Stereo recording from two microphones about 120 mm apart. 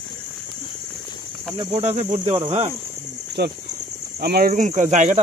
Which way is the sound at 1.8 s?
65° right (ahead or behind).